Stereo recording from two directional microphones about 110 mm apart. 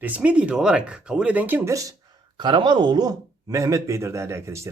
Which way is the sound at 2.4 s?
45° right (ahead or behind).